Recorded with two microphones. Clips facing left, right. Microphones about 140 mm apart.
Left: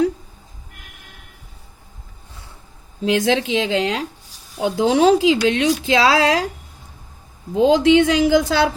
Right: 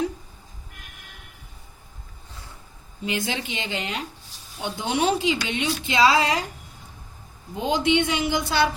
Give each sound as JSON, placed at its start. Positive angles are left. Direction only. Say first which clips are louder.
{"t": 3.0, "sound": "a woman's voice", "louder": "left 10 dB", "side_deg": 90}
{"t": 7.5, "sound": "a woman's voice", "louder": "left 9 dB", "side_deg": 90}